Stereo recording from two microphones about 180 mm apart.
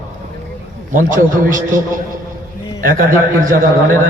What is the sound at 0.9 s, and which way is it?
A man's voice, 45° right (ahead or behind).